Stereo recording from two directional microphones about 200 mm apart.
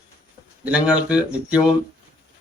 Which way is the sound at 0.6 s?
5° right (ahead or behind).